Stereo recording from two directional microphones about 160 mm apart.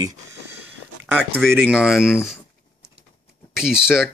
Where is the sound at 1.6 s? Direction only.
5° right (ahead or behind).